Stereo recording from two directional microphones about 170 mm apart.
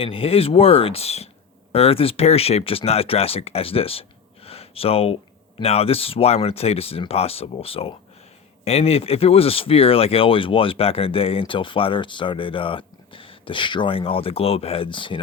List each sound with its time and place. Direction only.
0.0 s speech: 35° left (ahead or behind)
4.4 s a sound: 35° left (ahead or behind)
5.5 s speech: 35° left (ahead or behind)